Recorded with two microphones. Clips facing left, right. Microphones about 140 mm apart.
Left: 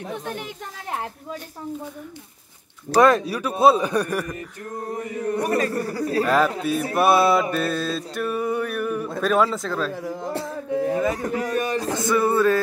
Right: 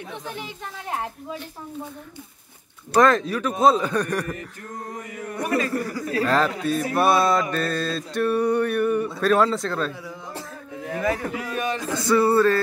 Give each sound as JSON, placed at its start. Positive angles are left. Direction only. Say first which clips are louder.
{"t": 3.0, "sound": "speech", "louder": "left 1 dB", "side_deg": 10}
{"t": 5.3, "sound": "speech", "louder": "left 1 dB", "side_deg": 35}
{"t": 6.2, "sound": "speech", "louder": "even", "side_deg": 10}
{"t": 7.5, "sound": "a sound", "louder": "left 1 dB", "side_deg": 5}
{"t": 11.1, "sound": "speech", "louder": "left 4 dB", "side_deg": 40}
{"t": 12.1, "sound": "speech", "louder": "right 2 dB", "side_deg": 15}